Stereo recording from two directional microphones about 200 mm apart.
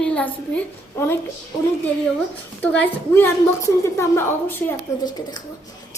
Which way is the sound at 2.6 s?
10° left (ahead or behind).